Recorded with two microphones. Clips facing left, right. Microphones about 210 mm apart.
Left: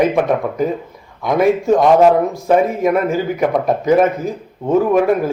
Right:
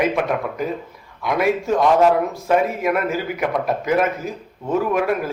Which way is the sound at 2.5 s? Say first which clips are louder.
Left 5 dB; 35° left (ahead or behind).